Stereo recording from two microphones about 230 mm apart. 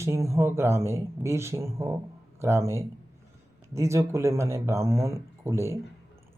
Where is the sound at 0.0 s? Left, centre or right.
Centre.